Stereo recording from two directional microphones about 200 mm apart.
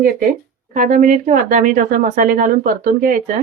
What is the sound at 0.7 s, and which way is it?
Speech, 40° right (ahead or behind).